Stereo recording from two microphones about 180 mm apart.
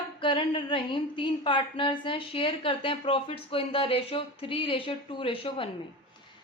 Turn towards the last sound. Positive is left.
turn(degrees=30)  # may be behind; listen again after turning